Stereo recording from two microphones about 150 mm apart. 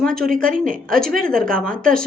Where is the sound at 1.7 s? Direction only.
70° right (ahead or behind).